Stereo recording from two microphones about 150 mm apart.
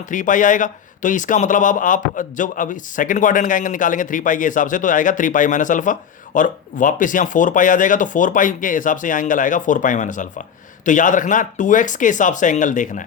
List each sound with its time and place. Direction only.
0.1 s a man's voice: 60° left (ahead or behind)